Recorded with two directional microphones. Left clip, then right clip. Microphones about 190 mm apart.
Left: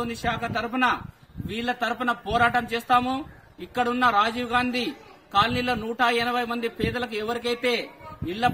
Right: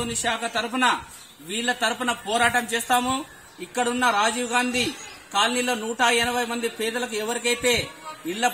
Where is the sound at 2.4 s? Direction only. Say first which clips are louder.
Right 2 dB; 15° left (ahead or behind).